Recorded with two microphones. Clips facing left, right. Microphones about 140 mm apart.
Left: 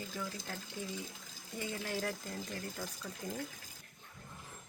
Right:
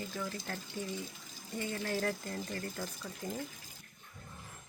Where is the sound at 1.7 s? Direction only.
10° left (ahead or behind).